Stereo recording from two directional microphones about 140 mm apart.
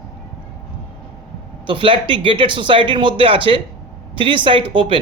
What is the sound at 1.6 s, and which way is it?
Speech, 40° right (ahead or behind).